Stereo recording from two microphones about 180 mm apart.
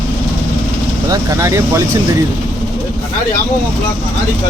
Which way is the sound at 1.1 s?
15° right (ahead or behind).